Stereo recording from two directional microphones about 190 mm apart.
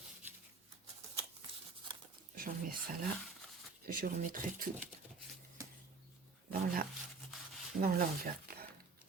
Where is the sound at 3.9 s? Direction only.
45° right (ahead or behind).